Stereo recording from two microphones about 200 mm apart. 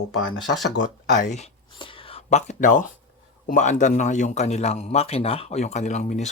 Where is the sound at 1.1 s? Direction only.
40° left (ahead or behind).